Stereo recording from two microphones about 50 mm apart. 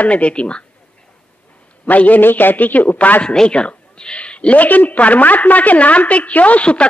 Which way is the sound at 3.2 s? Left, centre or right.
Centre.